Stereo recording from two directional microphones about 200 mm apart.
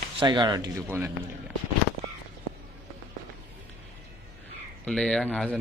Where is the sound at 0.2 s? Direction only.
25° right (ahead or behind).